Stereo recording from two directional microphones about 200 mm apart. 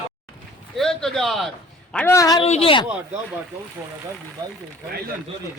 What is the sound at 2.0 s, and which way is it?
Speech, 15° left (ahead or behind).